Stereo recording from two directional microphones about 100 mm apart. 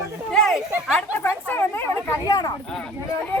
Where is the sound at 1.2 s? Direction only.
20° left (ahead or behind); by 2.5 s 35° left (ahead or behind).